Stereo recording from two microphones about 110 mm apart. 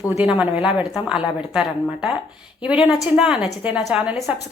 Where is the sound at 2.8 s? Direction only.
5° right (ahead or behind).